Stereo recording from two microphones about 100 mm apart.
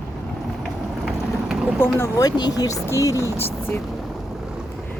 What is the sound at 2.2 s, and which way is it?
Speech, 40° left (ahead or behind).